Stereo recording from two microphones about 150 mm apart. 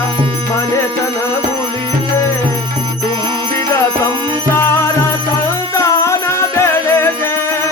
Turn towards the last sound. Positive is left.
turn(degrees=20)  # may be behind; listen again after turning